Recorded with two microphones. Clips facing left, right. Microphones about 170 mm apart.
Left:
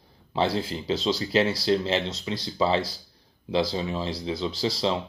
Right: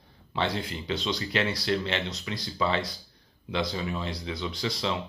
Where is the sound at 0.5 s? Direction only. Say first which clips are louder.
Left 4 dB; 30° left (ahead or behind).